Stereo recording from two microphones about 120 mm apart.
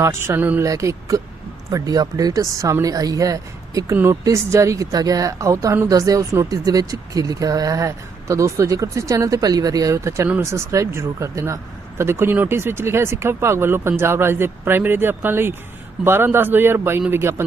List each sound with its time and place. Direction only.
0.0 s speech: 20° right (ahead or behind)
0.6 s speech: 25° right (ahead or behind)